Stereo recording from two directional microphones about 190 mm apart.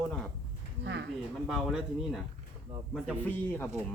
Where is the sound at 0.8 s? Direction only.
65° right (ahead or behind).